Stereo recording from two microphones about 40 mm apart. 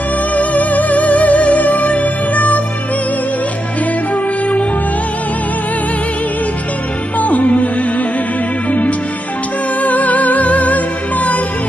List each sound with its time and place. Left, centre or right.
0.3 s music: left
4.1 s music: left
7.2 s music: left